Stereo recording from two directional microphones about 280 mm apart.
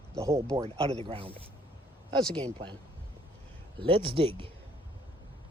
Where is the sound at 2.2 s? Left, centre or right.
Centre.